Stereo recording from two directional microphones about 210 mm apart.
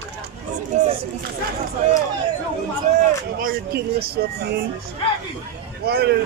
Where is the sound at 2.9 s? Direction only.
30° right (ahead or behind).